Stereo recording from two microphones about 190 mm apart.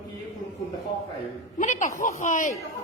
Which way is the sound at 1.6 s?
40° left (ahead or behind).